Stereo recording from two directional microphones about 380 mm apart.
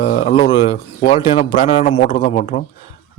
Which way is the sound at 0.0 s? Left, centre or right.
Centre.